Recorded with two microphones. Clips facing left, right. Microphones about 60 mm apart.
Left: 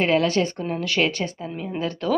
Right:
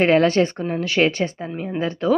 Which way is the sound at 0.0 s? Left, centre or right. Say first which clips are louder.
Right 4 dB; right.